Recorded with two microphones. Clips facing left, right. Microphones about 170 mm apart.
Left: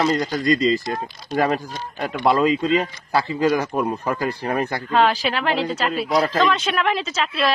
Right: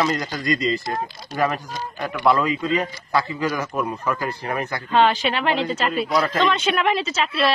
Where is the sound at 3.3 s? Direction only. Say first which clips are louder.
Left 5 dB; 30° left (ahead or behind).